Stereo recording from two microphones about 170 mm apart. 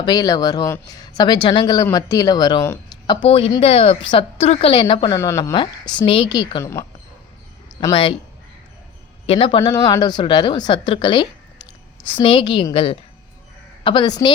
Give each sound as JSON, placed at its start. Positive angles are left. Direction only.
{"t": 0.0, "sound": "speech", "side_deg": 20}
{"t": 7.8, "sound": "speech", "side_deg": 25}
{"t": 9.2, "sound": "a man's voice", "side_deg": 30}
{"t": 9.7, "sound": "speech", "side_deg": 20}